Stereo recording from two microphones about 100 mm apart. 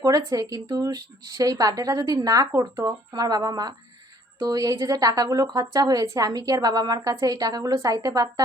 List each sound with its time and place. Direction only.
0.0 s speech: 35° right (ahead or behind)